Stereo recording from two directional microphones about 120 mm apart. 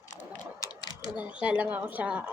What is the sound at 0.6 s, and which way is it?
Typing, 35° left (ahead or behind).